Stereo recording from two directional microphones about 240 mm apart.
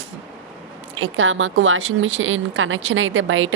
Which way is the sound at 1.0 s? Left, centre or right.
Right.